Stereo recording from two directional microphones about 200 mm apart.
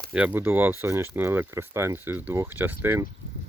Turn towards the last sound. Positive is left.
turn(degrees=-10)  # may be behind; listen again after turning